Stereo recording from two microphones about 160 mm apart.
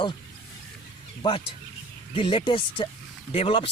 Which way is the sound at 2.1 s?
30° left (ahead or behind).